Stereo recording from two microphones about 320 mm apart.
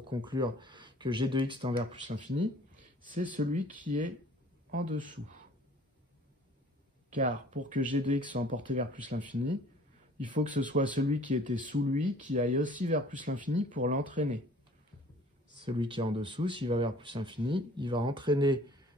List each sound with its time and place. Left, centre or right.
0.1 s speech: centre
7.1 s speech: right
15.6 s speech: centre